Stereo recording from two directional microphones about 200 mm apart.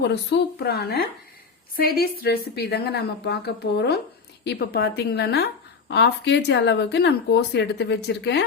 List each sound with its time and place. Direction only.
0.1 s a woman's voice: 55° left (ahead or behind)